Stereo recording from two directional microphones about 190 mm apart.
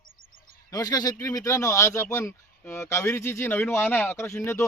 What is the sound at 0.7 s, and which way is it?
Speech, 20° left (ahead or behind).